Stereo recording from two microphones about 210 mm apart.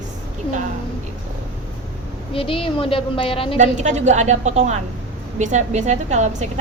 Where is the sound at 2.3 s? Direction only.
25° left (ahead or behind).